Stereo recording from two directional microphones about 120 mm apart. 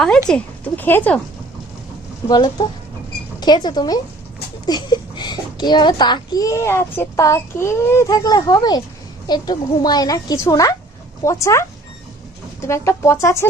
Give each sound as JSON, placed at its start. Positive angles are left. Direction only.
{"t": 0.3, "sound": "speech", "side_deg": 10}
{"t": 2.3, "sound": "a child's voice", "side_deg": 35}
{"t": 12.6, "sound": "speech", "side_deg": 25}